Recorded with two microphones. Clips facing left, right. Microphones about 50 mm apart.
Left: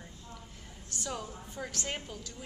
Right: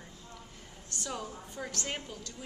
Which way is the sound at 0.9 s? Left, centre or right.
Centre.